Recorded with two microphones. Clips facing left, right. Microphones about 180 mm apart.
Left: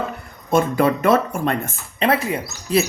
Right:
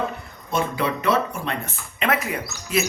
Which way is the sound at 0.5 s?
50° left (ahead or behind).